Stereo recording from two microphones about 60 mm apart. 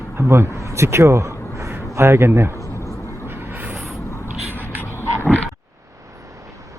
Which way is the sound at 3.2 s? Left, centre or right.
Right.